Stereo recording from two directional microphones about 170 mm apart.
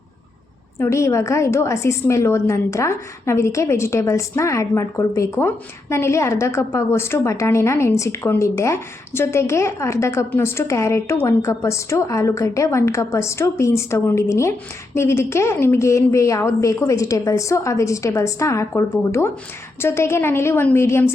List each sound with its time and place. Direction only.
0.8 s a woman's voice: 15° left (ahead or behind)